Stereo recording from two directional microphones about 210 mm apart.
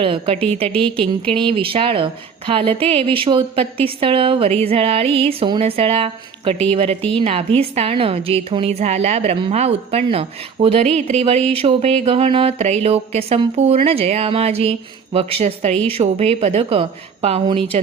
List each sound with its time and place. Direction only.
0.0 s a woman's voice: 25° right (ahead or behind)
0.7 s a woman's voice: 5° left (ahead or behind)
1.3 s a woman's voice: 25° right (ahead or behind)
15.7 s a woman's voice: 5° left (ahead or behind)
16.0 s a woman's voice: 30° right (ahead or behind)